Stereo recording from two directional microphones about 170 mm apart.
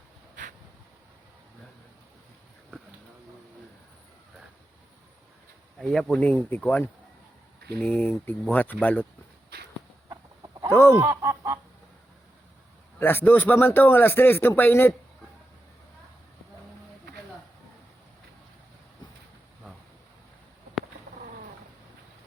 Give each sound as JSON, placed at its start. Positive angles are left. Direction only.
{"t": 5.8, "sound": "speech", "side_deg": 5}
{"t": 10.1, "sound": "chicken", "side_deg": -20}
{"t": 10.7, "sound": "fowl", "side_deg": 15}
{"t": 11.0, "sound": "quack", "side_deg": -20}
{"t": 13.0, "sound": "speech", "side_deg": 10}